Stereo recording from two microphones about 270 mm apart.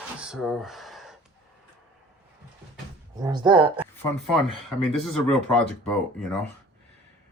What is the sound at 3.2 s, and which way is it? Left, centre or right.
Speech, centre.